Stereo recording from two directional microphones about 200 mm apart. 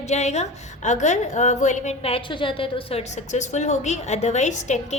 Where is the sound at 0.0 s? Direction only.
35° left (ahead or behind).